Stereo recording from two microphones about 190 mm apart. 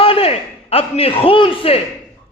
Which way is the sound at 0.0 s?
30° left (ahead or behind).